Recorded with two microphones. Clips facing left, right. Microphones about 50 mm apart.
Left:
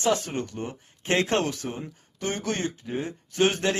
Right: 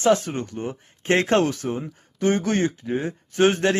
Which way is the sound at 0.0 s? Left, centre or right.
Right.